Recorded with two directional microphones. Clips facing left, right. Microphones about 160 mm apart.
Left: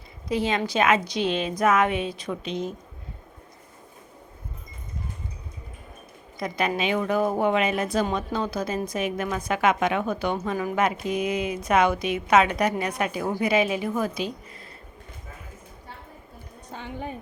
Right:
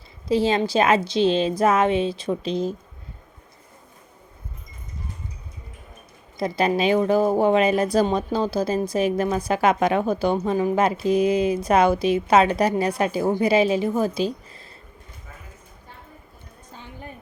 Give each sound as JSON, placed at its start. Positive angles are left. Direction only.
{"t": 0.3, "sound": "a woman's voice", "side_deg": -30}
{"t": 6.4, "sound": "a woman's voice", "side_deg": -35}
{"t": 16.7, "sound": "a sound", "side_deg": 70}